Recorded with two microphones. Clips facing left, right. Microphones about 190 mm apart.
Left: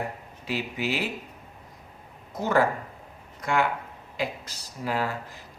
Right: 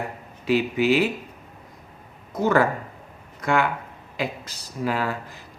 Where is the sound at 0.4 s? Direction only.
65° right (ahead or behind).